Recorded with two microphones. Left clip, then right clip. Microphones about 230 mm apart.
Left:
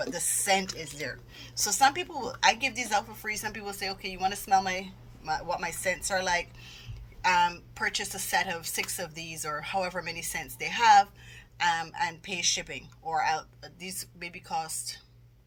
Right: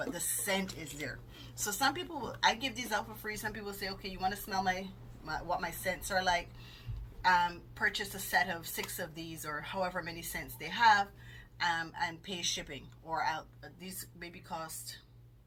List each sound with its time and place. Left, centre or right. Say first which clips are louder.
0.0 s a woman's voice: left 6 dB; left